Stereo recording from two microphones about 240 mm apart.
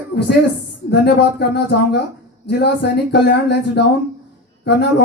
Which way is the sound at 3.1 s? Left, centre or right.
Left.